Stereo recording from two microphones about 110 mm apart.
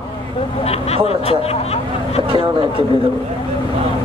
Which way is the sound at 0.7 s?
65° left (ahead or behind).